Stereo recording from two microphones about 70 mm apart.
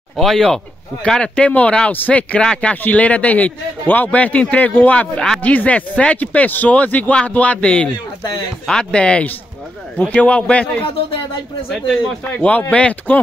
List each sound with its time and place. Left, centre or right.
0.2 s a man's voice: centre
12.4 s speech: left